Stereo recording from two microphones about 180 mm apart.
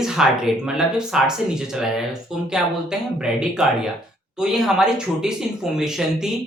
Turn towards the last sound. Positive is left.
turn(degrees=-5)  # may be behind; listen again after turning